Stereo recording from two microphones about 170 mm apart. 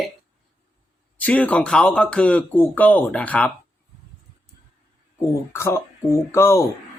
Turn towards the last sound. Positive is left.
turn(degrees=15)  # may be behind; listen again after turning